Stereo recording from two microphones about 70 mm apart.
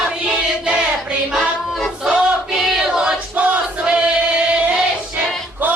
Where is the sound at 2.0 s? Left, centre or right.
Centre.